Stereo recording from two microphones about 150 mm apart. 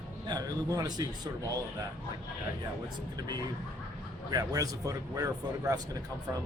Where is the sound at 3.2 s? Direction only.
25° right (ahead or behind).